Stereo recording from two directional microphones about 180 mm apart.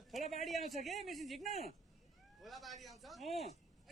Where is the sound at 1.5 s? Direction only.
35° right (ahead or behind).